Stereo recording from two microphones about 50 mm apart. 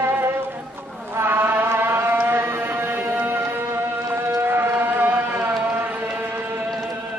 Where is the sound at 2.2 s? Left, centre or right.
Right.